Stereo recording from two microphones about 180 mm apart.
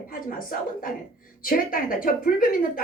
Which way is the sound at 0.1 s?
50° left (ahead or behind).